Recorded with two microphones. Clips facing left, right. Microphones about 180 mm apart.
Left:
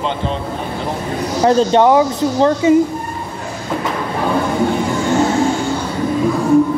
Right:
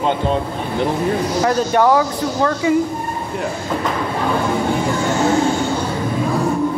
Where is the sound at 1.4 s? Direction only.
25° left (ahead or behind).